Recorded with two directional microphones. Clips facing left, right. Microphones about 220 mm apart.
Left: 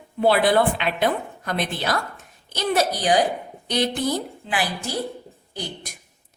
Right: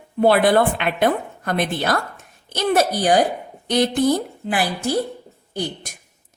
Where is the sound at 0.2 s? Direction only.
50° right (ahead or behind).